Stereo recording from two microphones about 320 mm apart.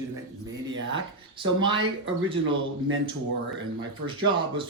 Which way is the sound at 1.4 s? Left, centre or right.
Centre.